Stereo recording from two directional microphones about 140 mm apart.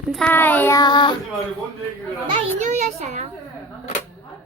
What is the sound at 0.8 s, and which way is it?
Child singing, 30° left (ahead or behind).